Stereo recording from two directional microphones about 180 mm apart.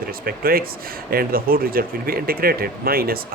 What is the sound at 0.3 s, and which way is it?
Speech, 55° right (ahead or behind).